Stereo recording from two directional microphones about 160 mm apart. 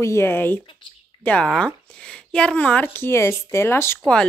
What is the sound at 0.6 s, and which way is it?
Speech, 30° left (ahead or behind).